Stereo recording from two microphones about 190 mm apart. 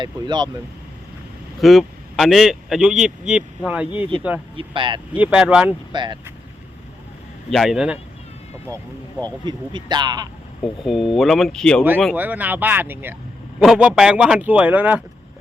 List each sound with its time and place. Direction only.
0.0 s speech: 25° right (ahead or behind)
1.6 s speech: centre (ahead or behind)
4.5 s speech: 25° right (ahead or behind)
5.1 s speech: 5° right (ahead or behind)
5.9 s speech: 25° right (ahead or behind)
7.5 s speech: centre (ahead or behind)
9.4 s speech: 25° right (ahead or behind)
10.6 s speech: centre (ahead or behind)
12.1 s speech: 10° right (ahead or behind)